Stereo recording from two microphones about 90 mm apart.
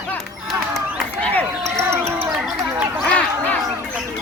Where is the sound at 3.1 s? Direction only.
15° left (ahead or behind).